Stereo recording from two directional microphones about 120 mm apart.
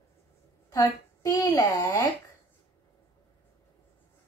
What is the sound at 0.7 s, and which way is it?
A woman's voice, 30° left (ahead or behind).